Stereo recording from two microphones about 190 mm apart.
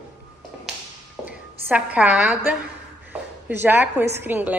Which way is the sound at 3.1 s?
10° right (ahead or behind).